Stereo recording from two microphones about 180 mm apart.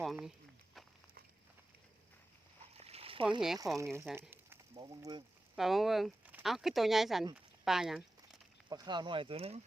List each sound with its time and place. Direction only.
0.0 s walk: centre (ahead or behind)
2.7 s a sound: 35° right (ahead or behind)
3.6 s speech: 15° right (ahead or behind)
4.0 s a sound: 10° right (ahead or behind)
4.7 s speech: 25° right (ahead or behind)
5.5 s speech: centre (ahead or behind)
8.7 s speech: 25° right (ahead or behind)